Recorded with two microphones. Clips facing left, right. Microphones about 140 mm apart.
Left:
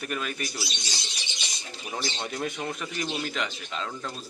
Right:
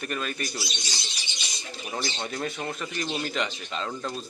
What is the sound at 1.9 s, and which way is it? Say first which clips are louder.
A man's voice: even; 10° left (ahead or behind).